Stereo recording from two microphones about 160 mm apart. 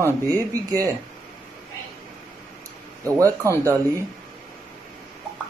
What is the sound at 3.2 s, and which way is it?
Speech, 20° right (ahead or behind).